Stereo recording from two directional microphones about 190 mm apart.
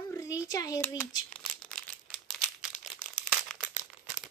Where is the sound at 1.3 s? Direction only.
5° left (ahead or behind).